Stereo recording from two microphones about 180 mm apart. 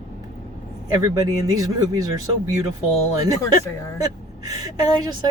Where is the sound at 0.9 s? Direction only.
20° right (ahead or behind).